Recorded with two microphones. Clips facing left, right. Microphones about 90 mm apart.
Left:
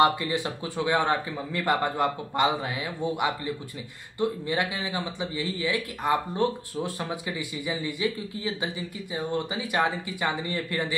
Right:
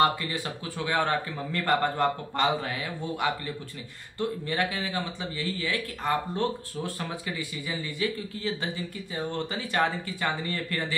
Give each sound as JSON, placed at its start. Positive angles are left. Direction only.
{"t": 0.0, "sound": "speech", "side_deg": 20}